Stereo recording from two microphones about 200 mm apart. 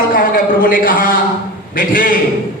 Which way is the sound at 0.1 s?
45° left (ahead or behind).